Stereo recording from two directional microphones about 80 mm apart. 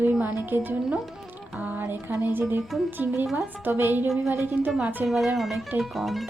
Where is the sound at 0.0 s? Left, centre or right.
Right.